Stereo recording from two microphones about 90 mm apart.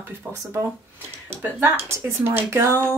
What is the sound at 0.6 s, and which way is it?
Speech, 20° right (ahead or behind).